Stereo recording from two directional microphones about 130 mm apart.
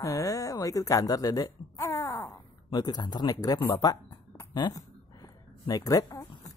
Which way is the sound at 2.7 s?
35° left (ahead or behind).